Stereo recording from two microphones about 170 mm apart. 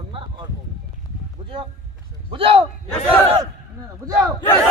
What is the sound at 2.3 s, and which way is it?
Speech, 30° right (ahead or behind).